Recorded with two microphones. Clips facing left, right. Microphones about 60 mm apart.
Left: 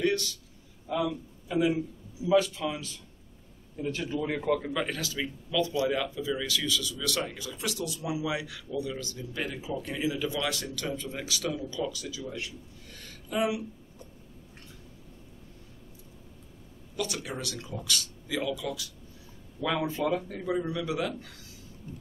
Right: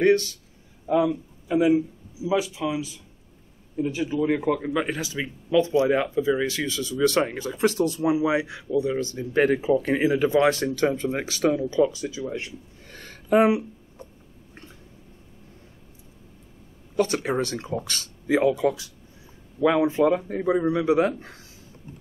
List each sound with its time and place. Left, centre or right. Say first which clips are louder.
0.0 s speech: right 9 dB; right
12.3 s a sound: right 6 dB; right
16.9 s speech: right 11 dB; right
19.6 s speech: right 9 dB; right